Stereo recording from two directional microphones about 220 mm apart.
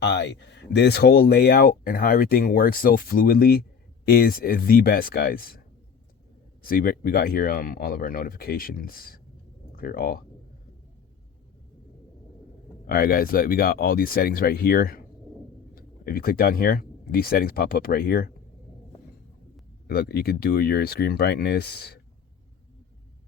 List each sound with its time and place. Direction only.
0.0 s speech: 50° left (ahead or behind)
6.6 s speech: 40° left (ahead or behind)
12.9 s speech: 45° left (ahead or behind)
19.9 s speech: 45° left (ahead or behind)